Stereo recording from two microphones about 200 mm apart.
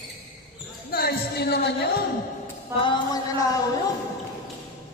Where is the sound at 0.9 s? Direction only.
50° left (ahead or behind).